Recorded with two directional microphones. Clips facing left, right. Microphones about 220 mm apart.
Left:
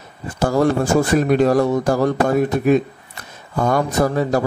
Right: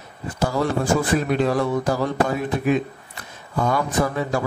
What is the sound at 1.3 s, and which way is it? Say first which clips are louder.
Speech: left 7 dB; 45° left (ahead or behind).